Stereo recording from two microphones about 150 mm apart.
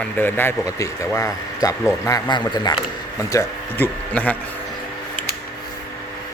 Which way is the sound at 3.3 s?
10° left (ahead or behind).